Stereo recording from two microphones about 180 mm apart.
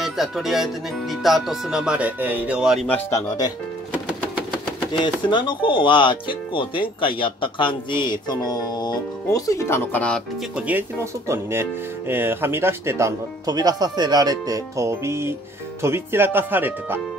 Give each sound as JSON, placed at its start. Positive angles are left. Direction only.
{"t": 0.0, "sound": "speech", "side_deg": 0}
{"t": 2.9, "sound": "speech", "side_deg": 15}
{"t": 4.9, "sound": "speech", "side_deg": 25}
{"t": 10.5, "sound": "speech", "side_deg": -10}